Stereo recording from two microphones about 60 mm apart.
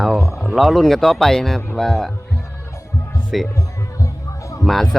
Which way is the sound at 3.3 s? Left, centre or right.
Centre.